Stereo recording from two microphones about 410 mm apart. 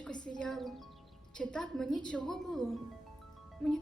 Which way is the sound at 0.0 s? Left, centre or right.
Centre.